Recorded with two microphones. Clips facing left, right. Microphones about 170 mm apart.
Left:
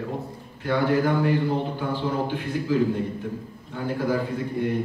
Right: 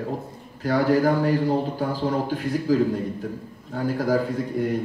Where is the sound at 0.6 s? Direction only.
40° right (ahead or behind).